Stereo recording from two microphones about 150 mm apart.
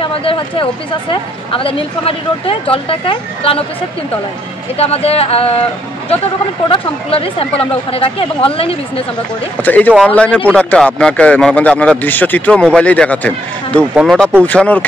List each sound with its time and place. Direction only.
0.0 s speech: 35° left (ahead or behind)
4.7 s speech: 40° left (ahead or behind)
9.6 s speech: 10° left (ahead or behind)